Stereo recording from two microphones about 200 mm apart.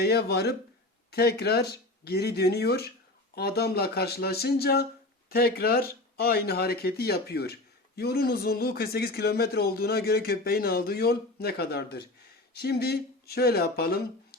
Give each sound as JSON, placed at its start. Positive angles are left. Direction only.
{"t": 0.0, "sound": "speech", "side_deg": 55}